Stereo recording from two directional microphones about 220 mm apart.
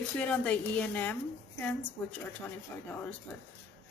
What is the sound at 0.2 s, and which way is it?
Speech, 5° left (ahead or behind).